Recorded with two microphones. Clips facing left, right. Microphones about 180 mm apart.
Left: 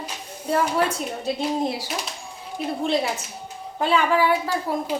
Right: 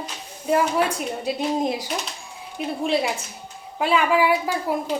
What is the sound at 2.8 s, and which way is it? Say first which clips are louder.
A woman's voice: right 1 dB; 10° right (ahead or behind).